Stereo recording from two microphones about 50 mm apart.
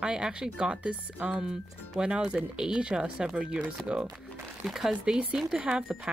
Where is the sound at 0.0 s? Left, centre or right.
Centre.